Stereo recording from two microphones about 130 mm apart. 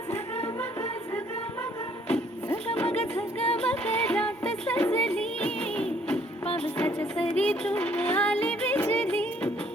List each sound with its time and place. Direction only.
0.1 s music: 55° left (ahead or behind)
2.6 s music: 55° left (ahead or behind)
3.7 s music: 10° left (ahead or behind)
6.4 s music: 50° left (ahead or behind)
6.7 s music: 10° left (ahead or behind)